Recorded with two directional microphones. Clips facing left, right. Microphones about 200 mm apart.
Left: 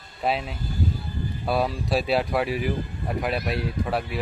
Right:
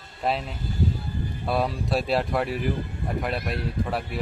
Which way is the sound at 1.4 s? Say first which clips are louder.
Left 1 dB; centre (ahead or behind).